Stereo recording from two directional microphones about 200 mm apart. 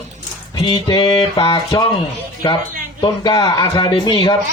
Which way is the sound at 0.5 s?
20° left (ahead or behind).